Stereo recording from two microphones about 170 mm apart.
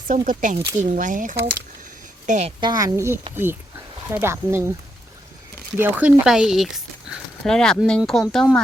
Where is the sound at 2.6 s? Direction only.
25° right (ahead or behind).